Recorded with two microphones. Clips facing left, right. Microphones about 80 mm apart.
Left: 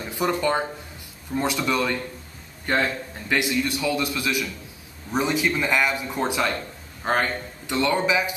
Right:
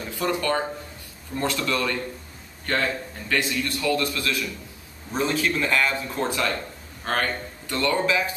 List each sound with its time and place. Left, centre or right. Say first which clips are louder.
0.0 s a man's voice: left 2 dB; centre